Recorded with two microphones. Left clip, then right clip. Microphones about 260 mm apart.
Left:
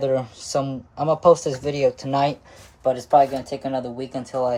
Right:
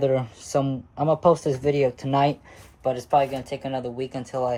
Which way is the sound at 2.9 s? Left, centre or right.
Right.